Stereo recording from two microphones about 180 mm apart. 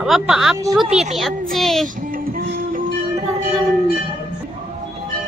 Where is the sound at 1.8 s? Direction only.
50° right (ahead or behind).